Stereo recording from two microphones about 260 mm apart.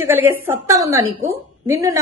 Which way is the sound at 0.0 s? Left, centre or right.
Centre.